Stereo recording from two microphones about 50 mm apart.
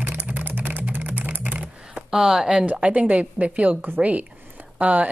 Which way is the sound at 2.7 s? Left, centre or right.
Right.